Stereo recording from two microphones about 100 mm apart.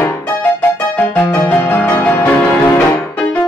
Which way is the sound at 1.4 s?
20° left (ahead or behind).